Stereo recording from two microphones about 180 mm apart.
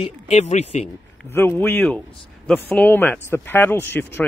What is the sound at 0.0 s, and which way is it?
Speech, 35° left (ahead or behind).